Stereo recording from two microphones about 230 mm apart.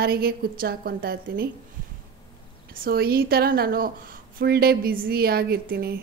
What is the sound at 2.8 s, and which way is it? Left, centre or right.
Speech, right.